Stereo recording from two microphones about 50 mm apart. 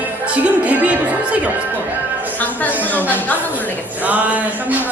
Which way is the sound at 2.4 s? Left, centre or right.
Left.